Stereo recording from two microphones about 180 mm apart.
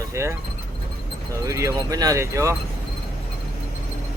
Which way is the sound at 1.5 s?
15° right (ahead or behind).